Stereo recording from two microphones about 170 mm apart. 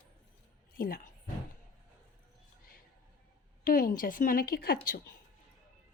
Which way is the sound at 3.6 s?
55° left (ahead or behind).